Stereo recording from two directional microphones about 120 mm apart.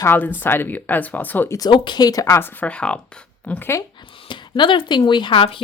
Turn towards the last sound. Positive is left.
turn(degrees=50)  # may be behind; listen again after turning